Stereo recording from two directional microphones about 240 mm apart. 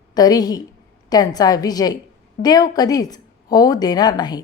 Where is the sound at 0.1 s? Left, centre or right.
Centre.